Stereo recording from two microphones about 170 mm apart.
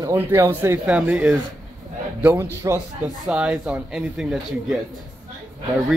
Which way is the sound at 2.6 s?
20° right (ahead or behind).